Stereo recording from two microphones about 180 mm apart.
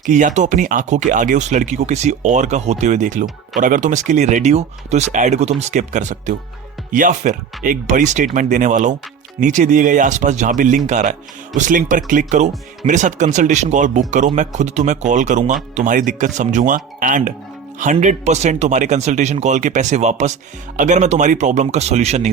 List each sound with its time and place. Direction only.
0.0 s speech: 45° right (ahead or behind)